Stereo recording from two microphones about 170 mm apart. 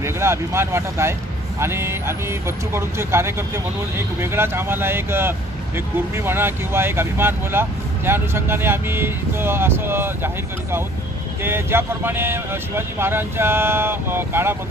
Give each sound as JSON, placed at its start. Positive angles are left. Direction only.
{"t": 0.0, "sound": "speech", "side_deg": -15}